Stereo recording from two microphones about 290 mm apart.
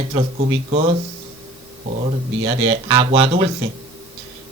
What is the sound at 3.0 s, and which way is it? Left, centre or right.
Speech, centre.